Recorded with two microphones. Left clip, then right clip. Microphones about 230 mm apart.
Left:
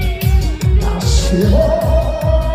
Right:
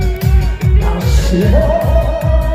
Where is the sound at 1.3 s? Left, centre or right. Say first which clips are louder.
Even; right.